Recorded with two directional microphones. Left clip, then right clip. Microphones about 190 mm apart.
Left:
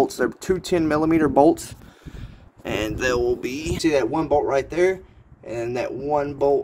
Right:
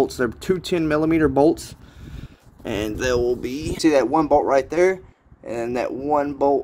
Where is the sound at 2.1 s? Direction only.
35° right (ahead or behind).